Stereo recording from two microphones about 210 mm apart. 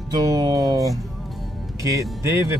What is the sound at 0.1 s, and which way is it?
Speech, 20° right (ahead or behind).